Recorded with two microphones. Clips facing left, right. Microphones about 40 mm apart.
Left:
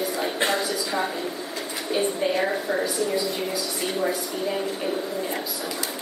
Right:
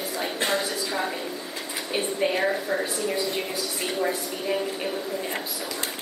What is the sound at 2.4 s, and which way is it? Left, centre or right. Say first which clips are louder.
Speech: even; centre.